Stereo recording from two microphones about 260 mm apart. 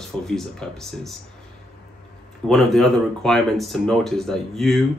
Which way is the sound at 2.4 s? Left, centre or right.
Centre.